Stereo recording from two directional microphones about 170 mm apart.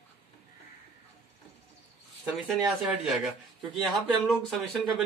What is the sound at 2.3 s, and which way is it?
Speech, centre (ahead or behind).